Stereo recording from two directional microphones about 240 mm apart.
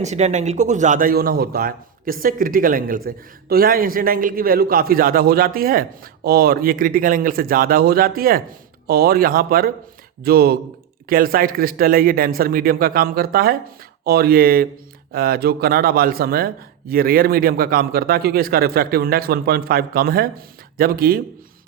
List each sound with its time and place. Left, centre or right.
0.0 s speech: right